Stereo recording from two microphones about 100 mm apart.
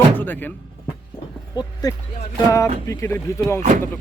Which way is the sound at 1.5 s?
40° left (ahead or behind).